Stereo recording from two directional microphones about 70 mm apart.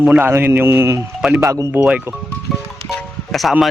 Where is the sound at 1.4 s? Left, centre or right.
Right.